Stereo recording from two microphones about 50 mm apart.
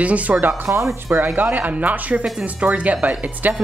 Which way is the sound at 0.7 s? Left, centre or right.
Right.